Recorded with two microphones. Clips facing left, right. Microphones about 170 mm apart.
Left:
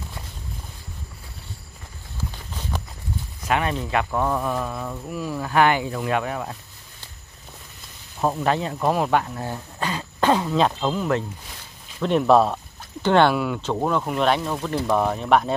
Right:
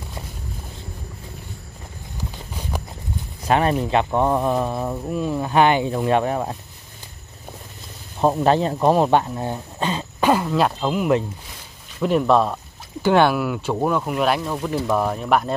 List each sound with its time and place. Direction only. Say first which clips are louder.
2.1 s walk: right 1 dB; 15° right (ahead or behind)
3.4 s speech: right 5 dB; 35° right (ahead or behind)
8.2 s speech: right 5 dB; 30° right (ahead or behind)
10.2 s speech: right 1 dB; 5° right (ahead or behind)
12.0 s speech: even; centre (ahead or behind)